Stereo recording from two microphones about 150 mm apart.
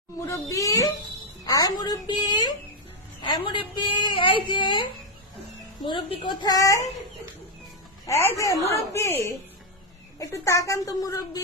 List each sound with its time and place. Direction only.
0.3 s a child's voice: 20° left (ahead or behind)
8.0 s a child's voice: 15° left (ahead or behind)